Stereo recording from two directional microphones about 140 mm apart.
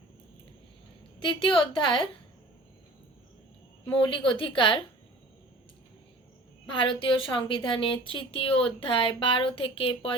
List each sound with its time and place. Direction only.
1.2 s a woman's voice: 35° left (ahead or behind)
3.9 s a woman's voice: 35° left (ahead or behind)
6.7 s a woman's voice: 35° left (ahead or behind)